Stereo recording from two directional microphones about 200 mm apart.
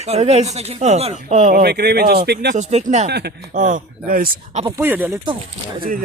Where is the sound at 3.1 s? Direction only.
55° right (ahead or behind).